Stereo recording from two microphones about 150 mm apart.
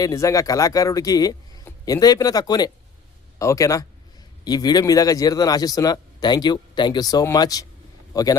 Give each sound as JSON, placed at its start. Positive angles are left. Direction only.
{"t": 0.0, "sound": "a man's voice", "side_deg": 20}